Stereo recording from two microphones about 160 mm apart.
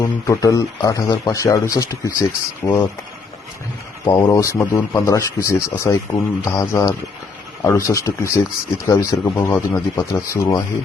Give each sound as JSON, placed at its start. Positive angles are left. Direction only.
{"t": 0.0, "sound": "speech", "side_deg": 20}
{"t": 4.0, "sound": "speech", "side_deg": 25}